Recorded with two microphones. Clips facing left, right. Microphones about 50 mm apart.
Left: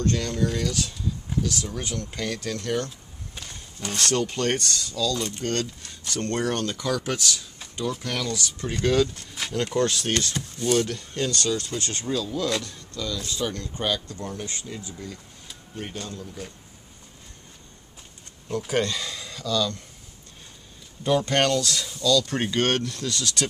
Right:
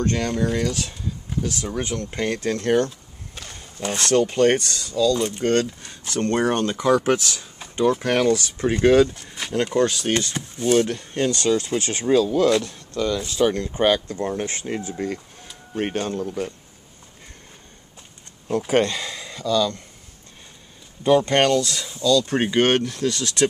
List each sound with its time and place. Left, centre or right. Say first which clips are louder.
0.0 s speech: right 3 dB; right
3.9 s speech: right 6 dB; centre
7.8 s speech: right 10 dB; right
9.7 s speech: right 3 dB; centre
10.1 s speech: right 3 dB; right
12.7 s speech: right 8 dB; right
18.9 s speech: right 2 dB; right
21.0 s speech: right 5 dB; right